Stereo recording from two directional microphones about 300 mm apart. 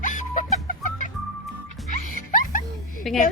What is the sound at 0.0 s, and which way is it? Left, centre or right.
Music, left.